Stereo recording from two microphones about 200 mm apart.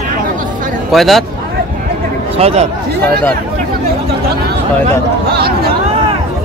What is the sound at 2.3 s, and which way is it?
Speech, 30° right (ahead or behind).